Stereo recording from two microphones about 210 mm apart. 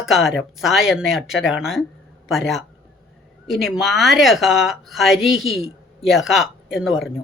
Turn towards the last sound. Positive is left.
turn(degrees=0)  # may be behind; listen again after turning